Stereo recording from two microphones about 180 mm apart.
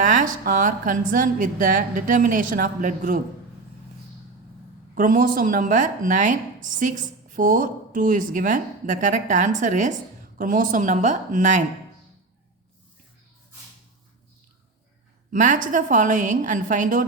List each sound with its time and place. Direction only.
0.0 s speech: 45° right (ahead or behind)
4.9 s speech: 50° right (ahead or behind)
15.3 s speech: 45° right (ahead or behind)